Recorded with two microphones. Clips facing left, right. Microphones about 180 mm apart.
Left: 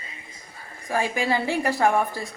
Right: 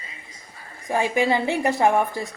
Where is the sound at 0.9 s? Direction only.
20° right (ahead or behind).